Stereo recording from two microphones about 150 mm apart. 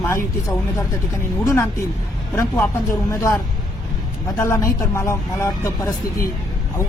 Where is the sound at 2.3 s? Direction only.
20° left (ahead or behind).